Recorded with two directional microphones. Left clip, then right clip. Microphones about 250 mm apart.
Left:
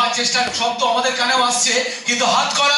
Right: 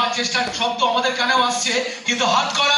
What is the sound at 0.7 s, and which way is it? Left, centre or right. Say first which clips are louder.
Speech: even; centre.